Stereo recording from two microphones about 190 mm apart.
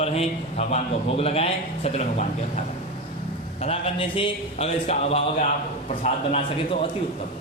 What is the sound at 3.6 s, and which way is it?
A man's voice, 30° left (ahead or behind).